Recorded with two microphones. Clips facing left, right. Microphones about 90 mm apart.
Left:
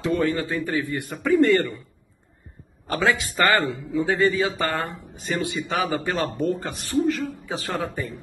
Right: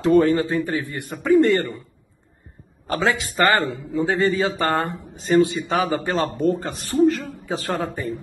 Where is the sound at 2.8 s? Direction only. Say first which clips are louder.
Right 1 dB; 30° right (ahead or behind).